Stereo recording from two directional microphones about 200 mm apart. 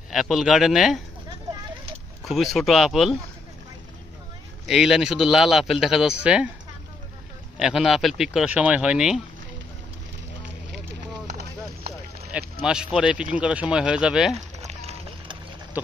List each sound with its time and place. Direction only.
0.1 s speech: centre (ahead or behind)
2.2 s speech: centre (ahead or behind)
4.6 s speech: centre (ahead or behind)
7.5 s speech: centre (ahead or behind)
11.2 s clip-clop: 55° right (ahead or behind)
12.3 s speech: 5° right (ahead or behind)
14.6 s a sound: 30° right (ahead or behind)